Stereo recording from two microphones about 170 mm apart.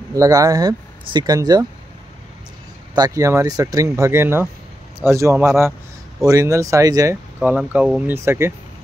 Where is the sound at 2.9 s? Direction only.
20° right (ahead or behind).